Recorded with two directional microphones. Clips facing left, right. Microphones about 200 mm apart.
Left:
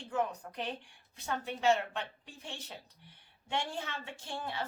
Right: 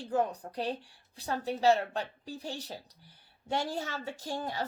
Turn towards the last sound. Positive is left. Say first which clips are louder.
# right 4 dB
turn(degrees=-40)  # may be behind; listen again after turning